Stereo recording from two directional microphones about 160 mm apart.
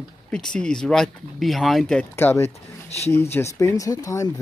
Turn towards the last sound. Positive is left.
turn(degrees=20)  # may be behind; listen again after turning